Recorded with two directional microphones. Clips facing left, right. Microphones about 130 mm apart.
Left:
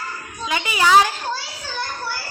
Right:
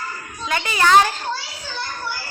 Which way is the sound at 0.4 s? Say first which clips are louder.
Even; 10° left (ahead or behind).